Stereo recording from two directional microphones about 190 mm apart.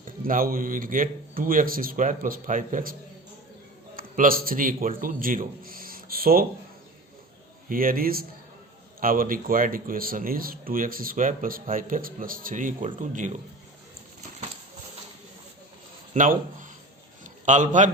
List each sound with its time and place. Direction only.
0.0 s a man's voice: 45° right (ahead or behind)
3.9 s a man's voice: 45° right (ahead or behind)
7.7 s a man's voice: 50° right (ahead or behind)
16.1 s a man's voice: 45° right (ahead or behind)